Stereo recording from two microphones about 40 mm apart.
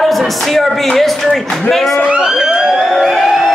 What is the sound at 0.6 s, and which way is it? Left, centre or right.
A man's voice, centre.